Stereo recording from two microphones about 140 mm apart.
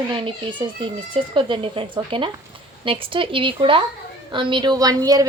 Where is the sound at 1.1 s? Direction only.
35° right (ahead or behind).